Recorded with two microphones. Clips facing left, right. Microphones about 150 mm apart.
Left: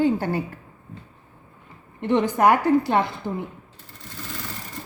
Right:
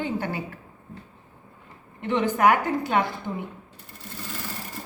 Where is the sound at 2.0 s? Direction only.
35° left (ahead or behind).